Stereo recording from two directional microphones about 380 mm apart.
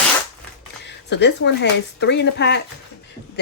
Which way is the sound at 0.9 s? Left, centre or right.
Left.